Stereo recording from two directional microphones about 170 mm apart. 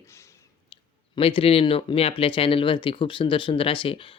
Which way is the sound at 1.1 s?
35° left (ahead or behind).